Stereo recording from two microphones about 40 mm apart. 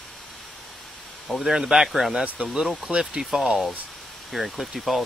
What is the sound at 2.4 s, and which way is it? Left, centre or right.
Speech, right.